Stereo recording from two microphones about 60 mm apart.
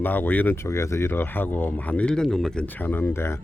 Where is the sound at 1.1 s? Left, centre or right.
Left.